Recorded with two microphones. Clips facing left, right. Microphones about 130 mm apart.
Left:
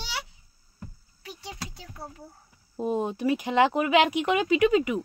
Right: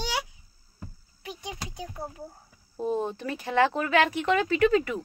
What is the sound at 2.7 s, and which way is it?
Speech, 15° left (ahead or behind).